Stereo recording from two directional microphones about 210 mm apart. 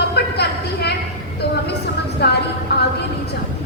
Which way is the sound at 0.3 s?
50° left (ahead or behind).